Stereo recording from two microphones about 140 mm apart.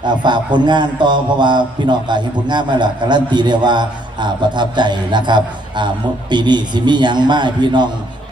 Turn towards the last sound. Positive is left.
turn(degrees=-30)  # may be behind; listen again after turning